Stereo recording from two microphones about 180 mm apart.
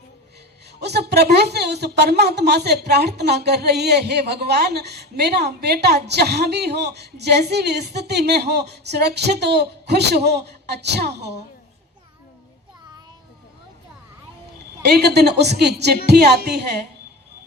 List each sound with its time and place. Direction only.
0.8 s a woman's voice: 65° right (ahead or behind)
14.9 s a woman's voice: 65° right (ahead or behind)